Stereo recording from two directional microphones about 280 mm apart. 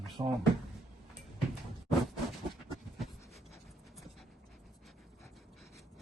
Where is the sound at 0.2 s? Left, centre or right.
Centre.